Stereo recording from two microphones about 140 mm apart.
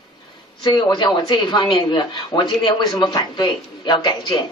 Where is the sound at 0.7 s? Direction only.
35° left (ahead or behind).